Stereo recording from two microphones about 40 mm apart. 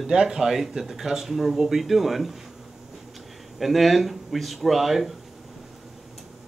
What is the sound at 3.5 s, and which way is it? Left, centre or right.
Speech, centre.